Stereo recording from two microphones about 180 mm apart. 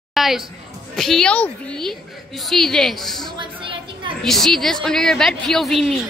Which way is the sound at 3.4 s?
30° right (ahead or behind).